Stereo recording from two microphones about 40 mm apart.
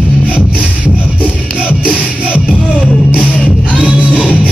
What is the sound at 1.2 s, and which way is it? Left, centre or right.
Music, right.